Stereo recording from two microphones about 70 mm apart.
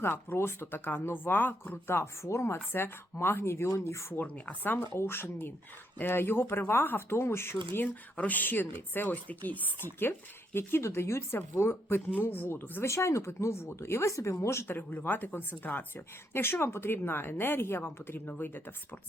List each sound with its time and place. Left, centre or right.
0.0 s a woman's voice: left
4.1 s a woman's voice: left
8.1 s a woman's voice: left
12.9 s a woman's voice: left
14.8 s a woman's voice: left